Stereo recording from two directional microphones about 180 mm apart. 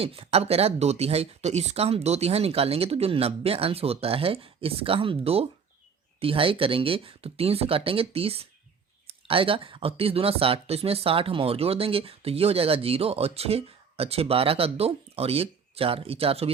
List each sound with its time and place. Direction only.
0.0 s speech: 35° right (ahead or behind)